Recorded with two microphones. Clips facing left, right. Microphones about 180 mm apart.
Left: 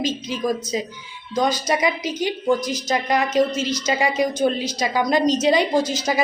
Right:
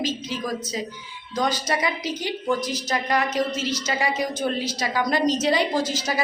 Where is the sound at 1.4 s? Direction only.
10° left (ahead or behind).